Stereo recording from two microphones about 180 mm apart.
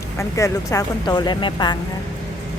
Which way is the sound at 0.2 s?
15° left (ahead or behind).